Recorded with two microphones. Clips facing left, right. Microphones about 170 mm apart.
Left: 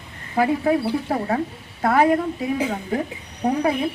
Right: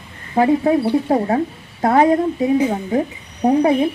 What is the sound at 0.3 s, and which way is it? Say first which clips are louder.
Speech: right 5 dB; 30° right (ahead or behind).